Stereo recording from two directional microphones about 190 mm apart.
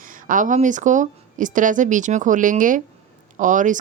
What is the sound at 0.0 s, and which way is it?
Speech, 45° right (ahead or behind).